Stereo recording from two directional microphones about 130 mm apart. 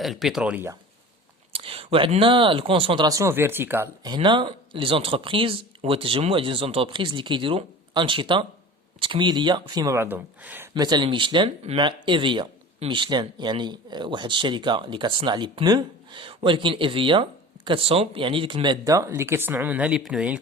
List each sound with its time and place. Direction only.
0.0 s speech: centre (ahead or behind)
1.5 s speech: 45° right (ahead or behind)
3.1 s speech: 25° right (ahead or behind)
4.0 s speech: 35° right (ahead or behind); by 10.7 s 15° right (ahead or behind)
10.8 s speech: 35° right (ahead or behind); by 20.4 s 5° right (ahead or behind)